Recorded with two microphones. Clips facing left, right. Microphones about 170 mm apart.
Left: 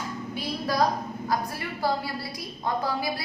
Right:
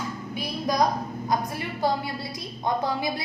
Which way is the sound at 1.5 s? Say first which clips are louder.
Right 2 dB; 20° right (ahead or behind).